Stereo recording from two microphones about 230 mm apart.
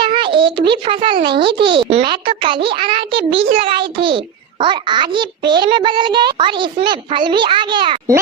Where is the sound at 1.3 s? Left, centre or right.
Right.